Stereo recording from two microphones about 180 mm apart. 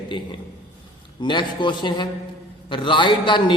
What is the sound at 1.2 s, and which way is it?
A man's voice, 25° left (ahead or behind).